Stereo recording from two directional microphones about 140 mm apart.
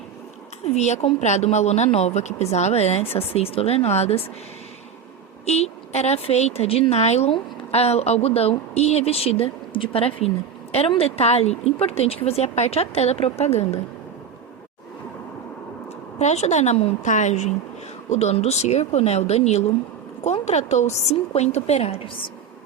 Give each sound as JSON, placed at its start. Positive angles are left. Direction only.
{"t": 0.6, "sound": "a woman's voice", "side_deg": 55}
{"t": 5.5, "sound": "a woman's voice", "side_deg": 50}
{"t": 16.1, "sound": "a woman's voice", "side_deg": 50}